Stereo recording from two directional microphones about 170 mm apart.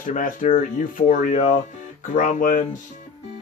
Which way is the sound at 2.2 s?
50° left (ahead or behind).